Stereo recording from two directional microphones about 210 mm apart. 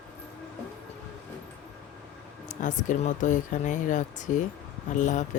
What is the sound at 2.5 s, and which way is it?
Speech, 35° left (ahead or behind).